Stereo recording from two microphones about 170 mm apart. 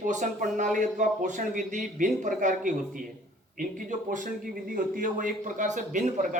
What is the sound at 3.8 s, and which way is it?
A man's voice, 50° right (ahead or behind).